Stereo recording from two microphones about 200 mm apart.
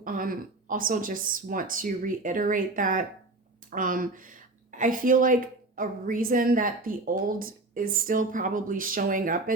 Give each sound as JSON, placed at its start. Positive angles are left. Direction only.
{"t": 0.0, "sound": "a woman's voice", "side_deg": -45}